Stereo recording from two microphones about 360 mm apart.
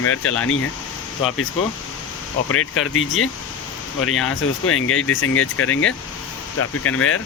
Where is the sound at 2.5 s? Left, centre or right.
Left.